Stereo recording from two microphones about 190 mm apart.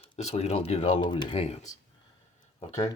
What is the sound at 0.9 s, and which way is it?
Speech, 25° left (ahead or behind).